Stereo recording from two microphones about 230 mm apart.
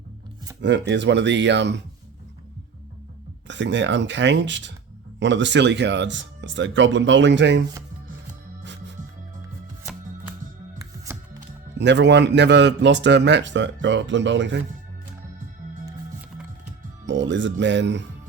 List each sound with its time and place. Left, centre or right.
0.6 s a man's voice: right
3.4 s a man's voice: right
8.6 s music: right
10.8 s music: centre
11.8 s a man's voice: right
17.1 s a man's voice: right